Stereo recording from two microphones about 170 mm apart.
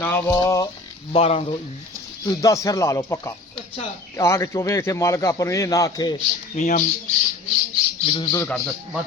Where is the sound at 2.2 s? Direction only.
20° left (ahead or behind).